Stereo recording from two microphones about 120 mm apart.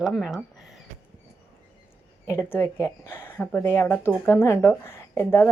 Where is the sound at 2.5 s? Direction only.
20° left (ahead or behind).